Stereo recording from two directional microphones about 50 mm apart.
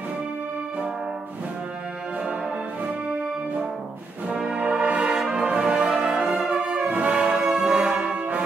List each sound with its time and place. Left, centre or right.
4.5 s brass instrument: right
5.0 s brass instrument: centre
6.9 s brass instrument: right
7.3 s brass instrument: centre
7.7 s brass instrument: centre